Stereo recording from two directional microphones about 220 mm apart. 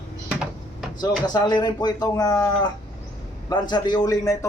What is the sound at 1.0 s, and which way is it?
Speech, 20° left (ahead or behind).